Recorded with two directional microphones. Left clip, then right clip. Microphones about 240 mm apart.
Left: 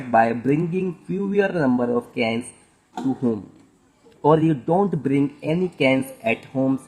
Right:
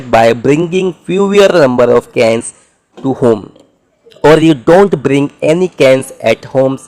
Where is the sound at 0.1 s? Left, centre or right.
Right.